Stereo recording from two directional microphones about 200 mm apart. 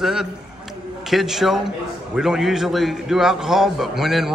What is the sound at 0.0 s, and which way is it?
A man's voice, centre (ahead or behind).